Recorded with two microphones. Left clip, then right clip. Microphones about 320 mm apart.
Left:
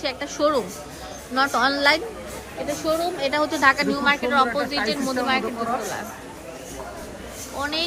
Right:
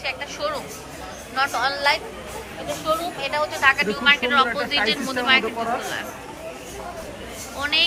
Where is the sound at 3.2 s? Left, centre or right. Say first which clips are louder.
Even; left.